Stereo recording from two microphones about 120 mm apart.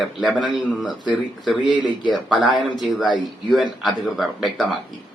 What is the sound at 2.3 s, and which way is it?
Speech, centre (ahead or behind).